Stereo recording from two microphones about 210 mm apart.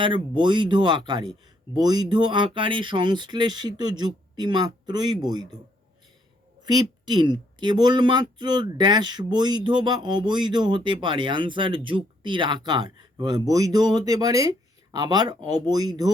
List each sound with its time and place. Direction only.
0.0 s speech: 25° right (ahead or behind)
6.6 s speech: 20° right (ahead or behind)